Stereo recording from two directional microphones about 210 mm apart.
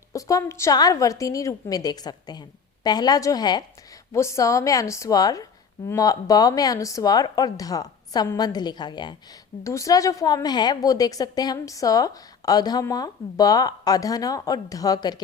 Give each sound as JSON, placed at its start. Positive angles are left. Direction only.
{"t": 0.1, "sound": "a woman's voice", "side_deg": 15}